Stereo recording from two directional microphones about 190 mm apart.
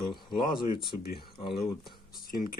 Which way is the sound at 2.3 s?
50° left (ahead or behind).